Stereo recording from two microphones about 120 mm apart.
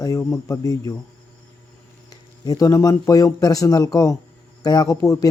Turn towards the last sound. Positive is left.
turn(degrees=25)  # may be behind; listen again after turning